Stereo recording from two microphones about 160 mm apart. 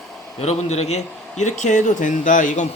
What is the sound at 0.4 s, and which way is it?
Speech, 40° left (ahead or behind).